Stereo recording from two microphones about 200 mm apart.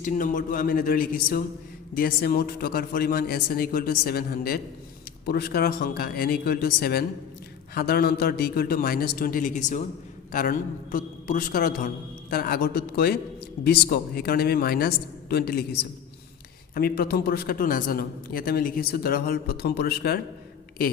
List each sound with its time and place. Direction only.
0.0 s a man's voice: 40° left (ahead or behind)